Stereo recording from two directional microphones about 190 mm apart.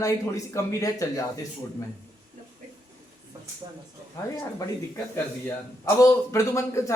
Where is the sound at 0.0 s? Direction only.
15° left (ahead or behind).